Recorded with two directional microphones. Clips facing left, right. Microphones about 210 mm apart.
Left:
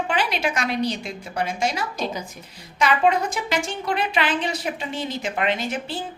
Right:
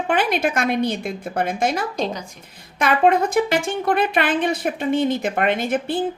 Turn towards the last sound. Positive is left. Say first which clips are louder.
# right 6 dB
turn(degrees=-55)  # may be behind; listen again after turning